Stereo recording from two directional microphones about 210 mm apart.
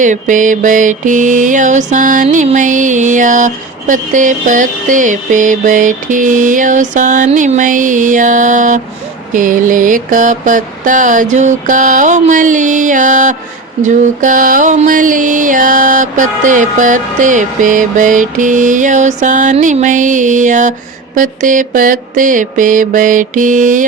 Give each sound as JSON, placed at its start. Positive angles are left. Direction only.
{"t": 0.0, "sound": "mantra", "side_deg": -35}